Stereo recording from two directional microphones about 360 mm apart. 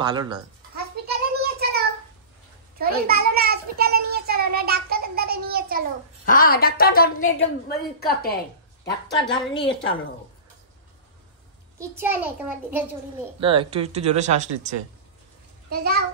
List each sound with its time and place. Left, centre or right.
0.0 s speech: centre
1.0 s a sound: right
2.8 s a child's voice: right
6.2 s a woman's voice: left
9.5 s a woman's voice: left
11.8 s a child's voice: centre
13.4 s speech: centre
15.7 s a child's voice: right